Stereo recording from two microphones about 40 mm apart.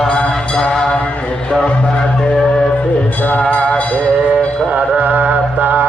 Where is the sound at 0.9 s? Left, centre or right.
Left.